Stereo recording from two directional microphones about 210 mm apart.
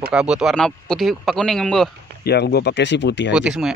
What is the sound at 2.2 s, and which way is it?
Speech, 50° left (ahead or behind).